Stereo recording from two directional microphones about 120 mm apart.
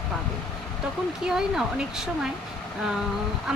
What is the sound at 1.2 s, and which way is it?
Speech, 5° right (ahead or behind).